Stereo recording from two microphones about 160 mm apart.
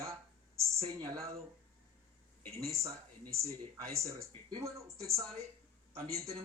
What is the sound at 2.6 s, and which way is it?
A man's voice, 20° right (ahead or behind).